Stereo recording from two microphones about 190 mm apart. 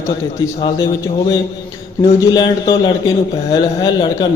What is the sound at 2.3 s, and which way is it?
A man's voice, 25° left (ahead or behind).